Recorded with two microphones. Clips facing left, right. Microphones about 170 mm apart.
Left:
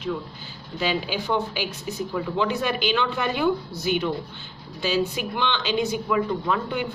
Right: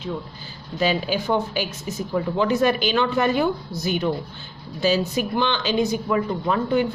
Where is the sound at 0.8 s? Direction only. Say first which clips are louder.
Right 4 dB; 40° right (ahead or behind).